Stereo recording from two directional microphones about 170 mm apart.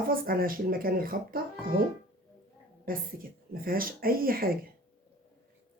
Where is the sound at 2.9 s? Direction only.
55° right (ahead or behind).